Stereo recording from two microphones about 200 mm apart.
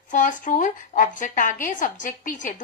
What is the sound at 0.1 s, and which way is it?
A woman's voice, 40° left (ahead or behind).